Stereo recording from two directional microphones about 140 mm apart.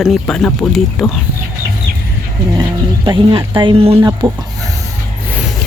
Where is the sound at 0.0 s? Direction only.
Centre (ahead or behind).